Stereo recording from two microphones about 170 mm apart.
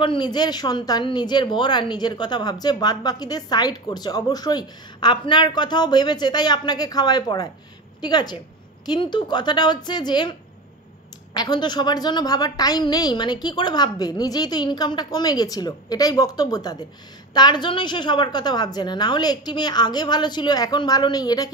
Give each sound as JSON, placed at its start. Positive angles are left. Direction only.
{"t": 0.0, "sound": "speech", "side_deg": 30}
{"t": 11.3, "sound": "speech", "side_deg": 25}